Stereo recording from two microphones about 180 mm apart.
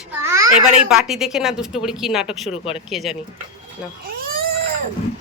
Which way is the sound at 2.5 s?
30° left (ahead or behind).